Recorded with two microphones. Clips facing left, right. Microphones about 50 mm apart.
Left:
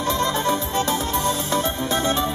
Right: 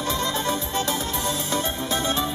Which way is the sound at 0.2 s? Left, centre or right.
Centre.